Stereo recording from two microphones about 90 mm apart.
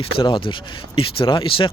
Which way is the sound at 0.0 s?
70° left (ahead or behind).